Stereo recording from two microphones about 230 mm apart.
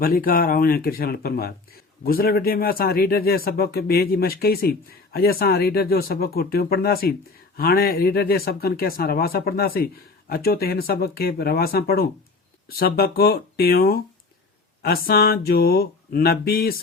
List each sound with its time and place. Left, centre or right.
0.0 s speech: left